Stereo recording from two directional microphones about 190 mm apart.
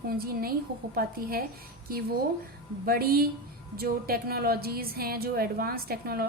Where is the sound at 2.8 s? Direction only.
50° right (ahead or behind).